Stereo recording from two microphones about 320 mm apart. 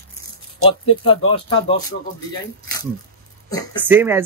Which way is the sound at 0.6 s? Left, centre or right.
Centre.